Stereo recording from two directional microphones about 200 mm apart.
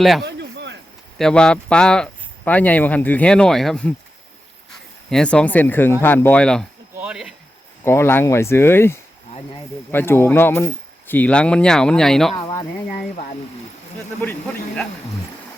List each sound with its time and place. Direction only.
0.0 s speech: centre (ahead or behind)
0.3 s a sound: 60° right (ahead or behind)
1.2 s speech: 5° left (ahead or behind)
5.0 s speech: 5° left (ahead or behind)
6.9 s a sound: 5° right (ahead or behind)
7.9 s speech: 10° left (ahead or behind)
12.3 s speech: 20° left (ahead or behind)